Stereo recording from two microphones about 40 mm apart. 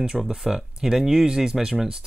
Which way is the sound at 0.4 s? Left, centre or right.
Centre.